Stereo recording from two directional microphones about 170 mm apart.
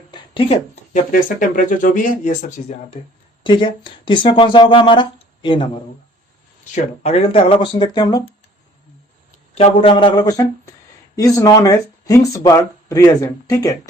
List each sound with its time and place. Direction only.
0.1 s a sound: 35° left (ahead or behind)
1.1 s speech: 50° left (ahead or behind)
3.4 s speech: 30° left (ahead or behind)
6.7 s speech: 40° left (ahead or behind)
9.6 s speech: 35° left (ahead or behind)